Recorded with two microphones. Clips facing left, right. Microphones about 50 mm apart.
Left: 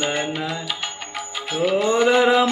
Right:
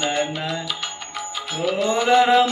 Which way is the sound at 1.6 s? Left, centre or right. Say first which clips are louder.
Left 3 dB; left.